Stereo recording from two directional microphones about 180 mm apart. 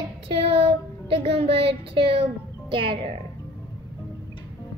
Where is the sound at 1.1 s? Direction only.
35° right (ahead or behind).